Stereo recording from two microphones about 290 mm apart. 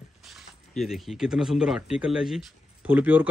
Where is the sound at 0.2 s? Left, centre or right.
Centre.